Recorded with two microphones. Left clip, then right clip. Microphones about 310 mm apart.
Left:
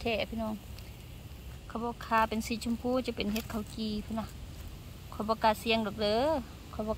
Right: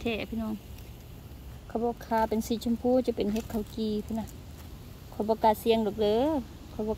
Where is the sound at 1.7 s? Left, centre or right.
Centre.